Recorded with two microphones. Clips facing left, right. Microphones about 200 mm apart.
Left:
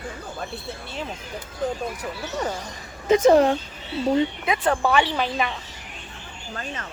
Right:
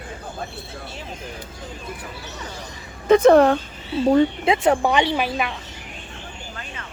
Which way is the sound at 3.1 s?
60° right (ahead or behind).